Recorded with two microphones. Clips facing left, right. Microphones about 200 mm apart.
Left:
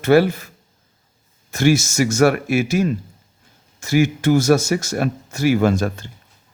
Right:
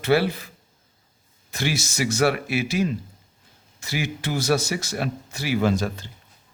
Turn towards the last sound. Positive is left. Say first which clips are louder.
# left 4 dB
turn(degrees=50)  # may be behind; listen again after turning